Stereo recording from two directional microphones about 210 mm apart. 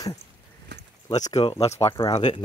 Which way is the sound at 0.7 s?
55° right (ahead or behind).